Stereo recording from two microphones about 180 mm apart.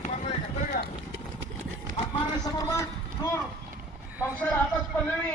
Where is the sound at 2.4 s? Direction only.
20° left (ahead or behind).